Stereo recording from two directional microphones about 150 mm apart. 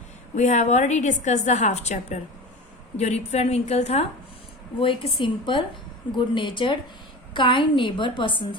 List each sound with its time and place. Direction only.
0.3 s a woman's voice: 50° left (ahead or behind)
4.8 s a woman's voice: 35° left (ahead or behind)